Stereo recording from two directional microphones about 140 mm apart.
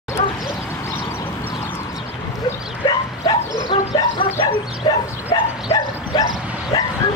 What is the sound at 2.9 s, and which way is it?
Bow-wow, 30° left (ahead or behind).